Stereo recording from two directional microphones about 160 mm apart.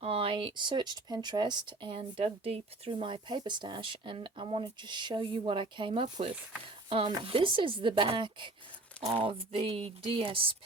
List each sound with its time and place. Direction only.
0.0 s speech: 35° right (ahead or behind)